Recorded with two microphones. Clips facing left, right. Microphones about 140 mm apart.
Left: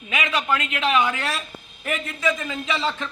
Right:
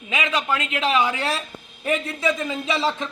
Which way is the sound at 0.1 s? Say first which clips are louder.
Even; 25° right (ahead or behind).